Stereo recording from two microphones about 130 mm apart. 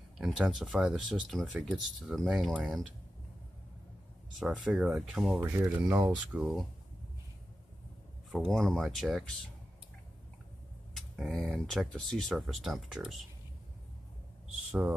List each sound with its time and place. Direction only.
0.2 s speech: 5° right (ahead or behind)
4.5 s speech: 5° right (ahead or behind)
5.4 s speech: 20° right (ahead or behind)
6.0 s speech: 5° right (ahead or behind)
8.3 s speech: 5° left (ahead or behind)
11.0 s a sound: centre (ahead or behind)
11.3 s speech: 10° left (ahead or behind)
14.7 s speech: 5° right (ahead or behind)